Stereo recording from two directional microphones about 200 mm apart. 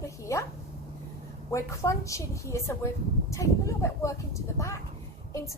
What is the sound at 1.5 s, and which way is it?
Speech, 15° left (ahead or behind).